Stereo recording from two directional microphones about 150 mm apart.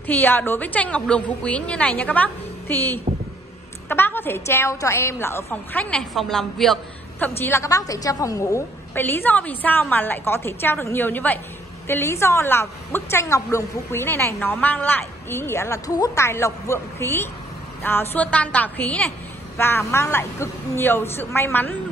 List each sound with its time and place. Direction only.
0.0 s a woman's voice: 10° left (ahead or behind)
7.2 s a woman's voice: 15° left (ahead or behind)